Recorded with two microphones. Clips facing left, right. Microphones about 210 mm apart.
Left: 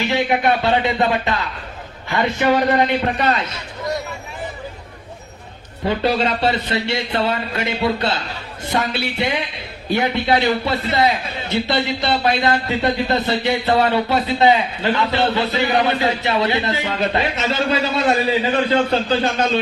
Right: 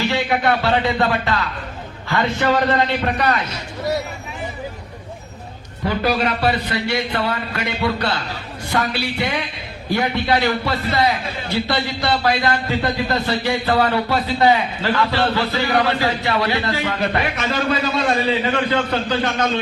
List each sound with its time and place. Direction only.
0.0 s a man's voice: 20° left (ahead or behind)
5.8 s a man's voice: 25° left (ahead or behind)